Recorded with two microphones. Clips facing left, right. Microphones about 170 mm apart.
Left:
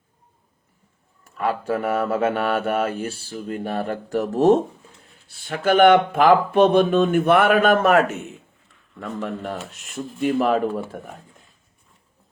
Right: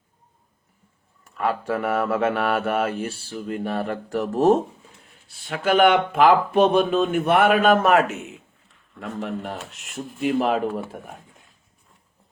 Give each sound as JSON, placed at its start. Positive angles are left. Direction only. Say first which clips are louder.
{"t": 1.4, "sound": "speech", "louder": "left 1 dB", "side_deg": 40}
{"t": 5.5, "sound": "speech", "louder": "left 3 dB", "side_deg": 45}